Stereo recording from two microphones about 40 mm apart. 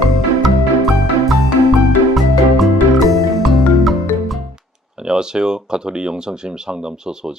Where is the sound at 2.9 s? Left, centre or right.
Centre.